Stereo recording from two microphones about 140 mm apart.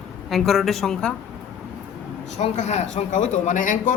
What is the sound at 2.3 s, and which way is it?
Speech, 55° left (ahead or behind).